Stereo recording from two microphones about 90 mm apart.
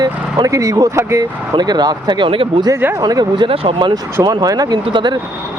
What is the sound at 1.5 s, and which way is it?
Speech, 50° right (ahead or behind).